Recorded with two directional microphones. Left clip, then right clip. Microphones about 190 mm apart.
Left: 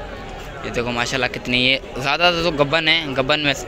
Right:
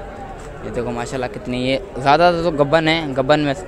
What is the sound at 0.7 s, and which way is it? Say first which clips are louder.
A man's voice: left 2 dB; 15° right (ahead or behind).